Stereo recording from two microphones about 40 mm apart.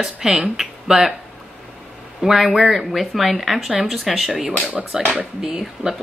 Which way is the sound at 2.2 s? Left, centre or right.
Centre.